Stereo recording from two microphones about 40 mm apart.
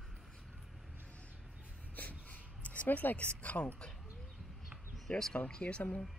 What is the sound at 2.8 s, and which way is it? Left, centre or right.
Speech, left.